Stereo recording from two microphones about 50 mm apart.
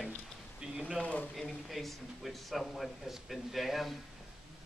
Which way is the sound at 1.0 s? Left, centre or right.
Left.